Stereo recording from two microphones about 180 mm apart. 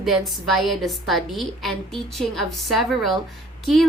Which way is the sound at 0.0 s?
Centre (ahead or behind).